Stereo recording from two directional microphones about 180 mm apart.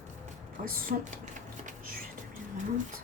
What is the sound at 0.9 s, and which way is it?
Speech, 50° right (ahead or behind).